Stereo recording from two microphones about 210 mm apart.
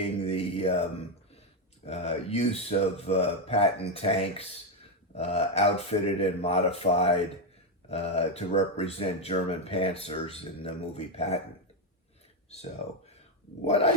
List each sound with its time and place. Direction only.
0.0 s mantra: 30° left (ahead or behind)
1.9 s speech: 30° left (ahead or behind)